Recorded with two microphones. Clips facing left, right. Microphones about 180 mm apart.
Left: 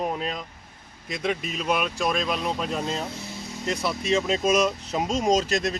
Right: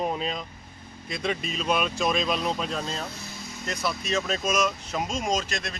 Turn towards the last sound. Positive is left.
turn(degrees=40)  # may be behind; listen again after turning